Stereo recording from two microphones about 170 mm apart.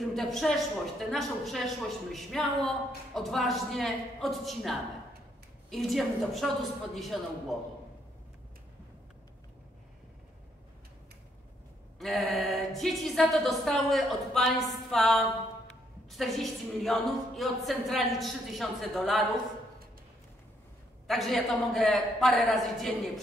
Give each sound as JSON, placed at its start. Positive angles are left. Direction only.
{"t": 0.0, "sound": "a woman's voice", "side_deg": 0}
{"t": 12.0, "sound": "a woman's voice", "side_deg": 0}
{"t": 21.1, "sound": "a woman's voice", "side_deg": 0}